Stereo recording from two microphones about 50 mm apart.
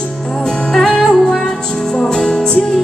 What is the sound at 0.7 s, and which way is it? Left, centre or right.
Music, centre.